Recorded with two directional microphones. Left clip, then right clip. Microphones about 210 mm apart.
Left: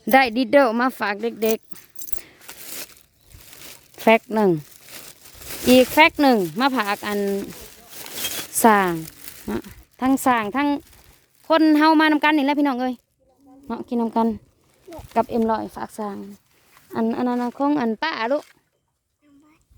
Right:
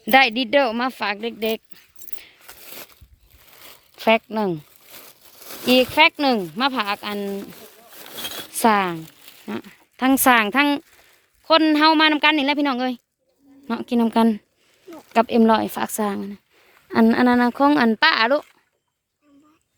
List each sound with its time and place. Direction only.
0.0 s speech: 25° left (ahead or behind)
3.9 s speech: 35° left (ahead or behind)
5.6 s speech: 30° left (ahead or behind)
8.0 s a sound: 30° left (ahead or behind)
9.5 s a woman's voice: 25° left (ahead or behind)
10.0 s speech: 5° left (ahead or behind)
11.4 s a woman's voice: 20° left (ahead or behind)
13.7 s a woman's voice: 5° left (ahead or behind)